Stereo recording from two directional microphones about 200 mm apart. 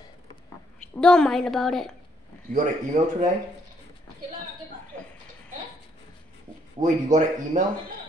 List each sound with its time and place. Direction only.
0.9 s a woman's voice: 5° left (ahead or behind)
2.5 s a man's voice: 35° right (ahead or behind)
6.8 s a man's voice: 40° right (ahead or behind)